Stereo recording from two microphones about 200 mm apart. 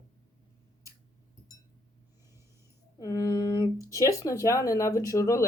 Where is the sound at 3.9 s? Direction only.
15° left (ahead or behind).